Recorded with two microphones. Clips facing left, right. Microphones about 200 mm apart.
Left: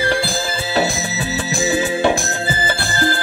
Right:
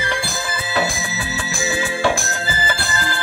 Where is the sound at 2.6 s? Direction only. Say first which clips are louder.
Left 6 dB; 35° left (ahead or behind).